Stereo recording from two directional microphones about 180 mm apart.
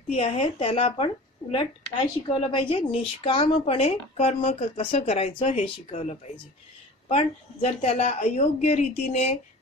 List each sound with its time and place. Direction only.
0.1 s speech: 35° left (ahead or behind)